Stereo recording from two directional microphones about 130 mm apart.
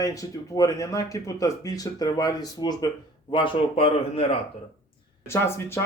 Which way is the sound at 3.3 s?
45° left (ahead or behind).